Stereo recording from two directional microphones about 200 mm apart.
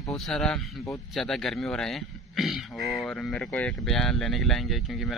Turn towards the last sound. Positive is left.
turn(degrees=0)  # may be behind; listen again after turning